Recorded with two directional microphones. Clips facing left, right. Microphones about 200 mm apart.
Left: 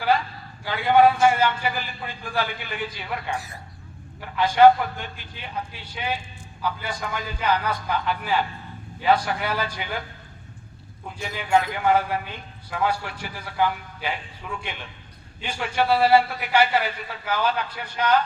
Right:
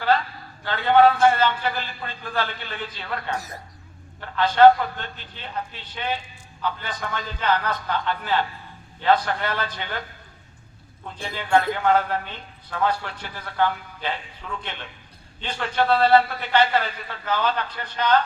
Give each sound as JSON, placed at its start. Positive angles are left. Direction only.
{"t": 0.6, "sound": "a man's voice", "side_deg": 10}
{"t": 3.3, "sound": "speech", "side_deg": -40}
{"t": 4.2, "sound": "a man's voice", "side_deg": 10}
{"t": 11.3, "sound": "a man's voice", "side_deg": 10}